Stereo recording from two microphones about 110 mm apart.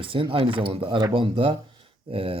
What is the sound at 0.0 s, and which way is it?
Speech, 50° right (ahead or behind).